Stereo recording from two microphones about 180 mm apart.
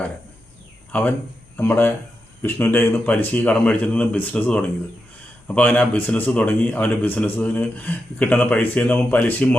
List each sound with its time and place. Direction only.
1.5 s a man's voice: 10° left (ahead or behind)